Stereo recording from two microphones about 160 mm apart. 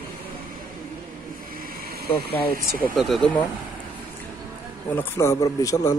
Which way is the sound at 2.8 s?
Centre (ahead or behind).